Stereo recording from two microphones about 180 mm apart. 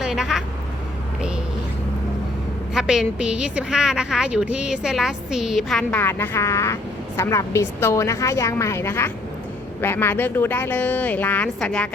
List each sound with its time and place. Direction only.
0.0 s vehicle: centre (ahead or behind)
2.7 s a woman's voice: 5° right (ahead or behind)